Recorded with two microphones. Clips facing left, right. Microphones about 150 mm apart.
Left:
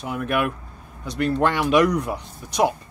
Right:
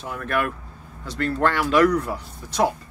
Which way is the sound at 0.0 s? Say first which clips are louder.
Left 2 dB; 15° left (ahead or behind).